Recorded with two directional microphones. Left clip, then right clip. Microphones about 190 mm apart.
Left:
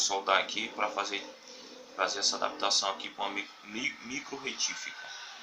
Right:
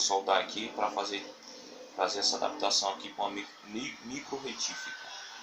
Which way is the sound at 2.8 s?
15° left (ahead or behind).